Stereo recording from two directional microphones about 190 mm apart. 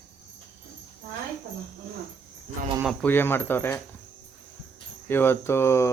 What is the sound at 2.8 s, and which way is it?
Speech, 10° left (ahead or behind).